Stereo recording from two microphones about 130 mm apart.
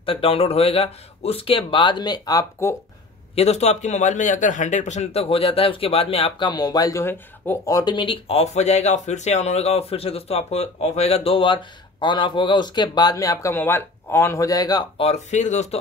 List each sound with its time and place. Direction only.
0.0 s speech: 45° left (ahead or behind); by 2.7 s 30° left (ahead or behind)
3.3 s a man's voice: 55° left (ahead or behind)
6.5 s speech: 30° left (ahead or behind)
15.0 s a man's voice: 55° left (ahead or behind)